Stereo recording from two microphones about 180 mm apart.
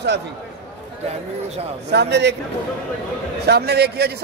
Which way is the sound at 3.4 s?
65° right (ahead or behind).